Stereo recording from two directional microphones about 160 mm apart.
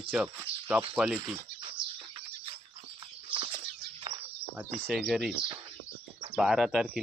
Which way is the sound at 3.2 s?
35° right (ahead or behind).